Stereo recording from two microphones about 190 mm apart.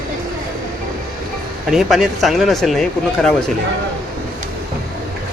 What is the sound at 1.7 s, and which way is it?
Speech, centre (ahead or behind).